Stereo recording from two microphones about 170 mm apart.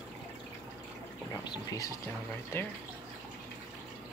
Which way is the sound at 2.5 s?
15° left (ahead or behind).